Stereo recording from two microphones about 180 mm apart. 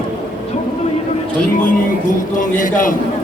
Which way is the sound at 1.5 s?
50° left (ahead or behind).